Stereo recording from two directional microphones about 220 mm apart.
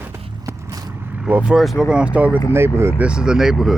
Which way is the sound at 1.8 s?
5° right (ahead or behind).